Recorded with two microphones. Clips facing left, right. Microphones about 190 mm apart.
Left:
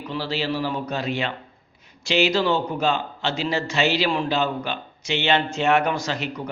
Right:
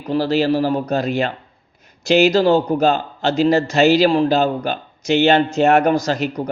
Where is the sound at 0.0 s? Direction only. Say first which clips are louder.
Right 10 dB; 45° right (ahead or behind).